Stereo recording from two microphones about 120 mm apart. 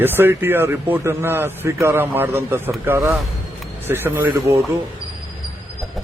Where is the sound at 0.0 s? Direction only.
15° right (ahead or behind).